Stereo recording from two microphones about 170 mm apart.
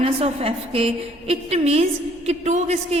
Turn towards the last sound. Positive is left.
turn(degrees=-40)  # may be behind; listen again after turning